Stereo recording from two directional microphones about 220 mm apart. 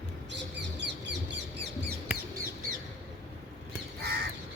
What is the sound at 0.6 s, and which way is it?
Bird, 50° right (ahead or behind).